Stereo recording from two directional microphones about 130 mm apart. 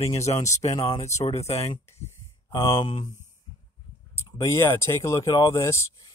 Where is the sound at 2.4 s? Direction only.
35° left (ahead or behind).